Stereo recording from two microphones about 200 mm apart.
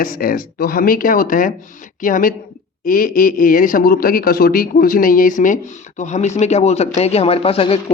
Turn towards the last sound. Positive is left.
turn(degrees=30)  # may be behind; listen again after turning